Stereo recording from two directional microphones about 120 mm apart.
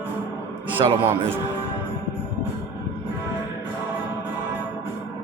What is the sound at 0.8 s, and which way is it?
Speech, 45° right (ahead or behind).